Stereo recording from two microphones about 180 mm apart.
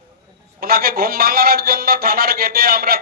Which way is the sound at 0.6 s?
55° right (ahead or behind).